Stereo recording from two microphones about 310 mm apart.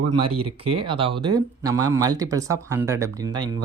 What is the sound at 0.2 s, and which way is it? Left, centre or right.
Speech, centre.